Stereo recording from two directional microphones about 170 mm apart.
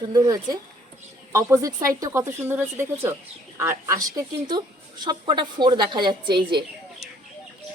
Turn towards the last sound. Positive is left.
turn(degrees=-30)  # may be behind; listen again after turning